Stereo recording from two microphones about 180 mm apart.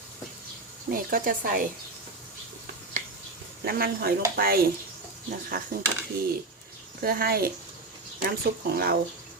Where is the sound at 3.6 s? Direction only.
55° right (ahead or behind).